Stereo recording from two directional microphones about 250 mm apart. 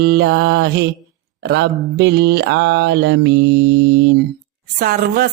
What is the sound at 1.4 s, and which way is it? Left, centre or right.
Mantra, right.